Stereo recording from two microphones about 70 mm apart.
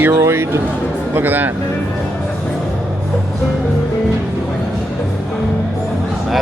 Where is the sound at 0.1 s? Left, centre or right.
Right.